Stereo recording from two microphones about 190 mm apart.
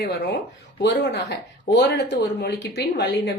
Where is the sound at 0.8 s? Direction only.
65° left (ahead or behind).